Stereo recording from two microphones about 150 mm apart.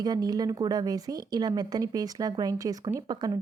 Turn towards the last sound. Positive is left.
turn(degrees=-25)  # may be behind; listen again after turning